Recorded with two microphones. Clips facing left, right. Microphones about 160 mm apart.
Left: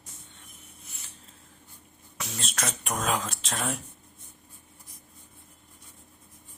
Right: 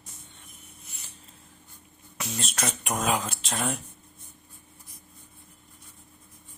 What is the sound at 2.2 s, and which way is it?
Speech, centre (ahead or behind).